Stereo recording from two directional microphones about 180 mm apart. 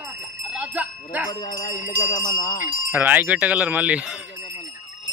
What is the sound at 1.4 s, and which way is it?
Jingle bell, 20° left (ahead or behind).